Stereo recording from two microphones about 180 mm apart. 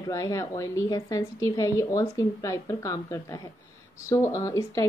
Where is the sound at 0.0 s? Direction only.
15° left (ahead or behind).